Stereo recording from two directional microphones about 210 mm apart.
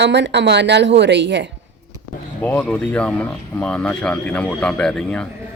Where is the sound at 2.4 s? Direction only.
10° left (ahead or behind).